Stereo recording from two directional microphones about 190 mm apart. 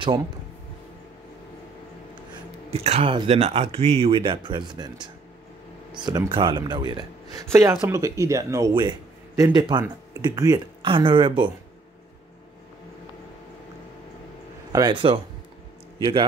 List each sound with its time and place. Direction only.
2.7 s speech: 30° right (ahead or behind)
14.7 s speech: 20° right (ahead or behind)